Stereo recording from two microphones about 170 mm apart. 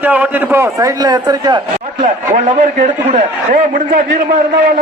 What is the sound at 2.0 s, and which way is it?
A man's voice, 45° right (ahead or behind).